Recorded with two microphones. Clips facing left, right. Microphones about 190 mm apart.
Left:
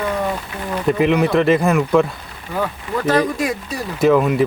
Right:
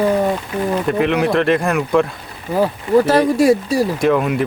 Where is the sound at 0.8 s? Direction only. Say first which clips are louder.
Left 4 dB; centre (ahead or behind).